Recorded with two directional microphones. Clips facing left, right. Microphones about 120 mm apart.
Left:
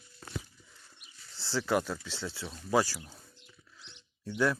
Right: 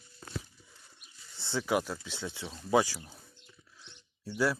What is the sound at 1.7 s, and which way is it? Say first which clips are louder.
Speech: even; 10° right (ahead or behind).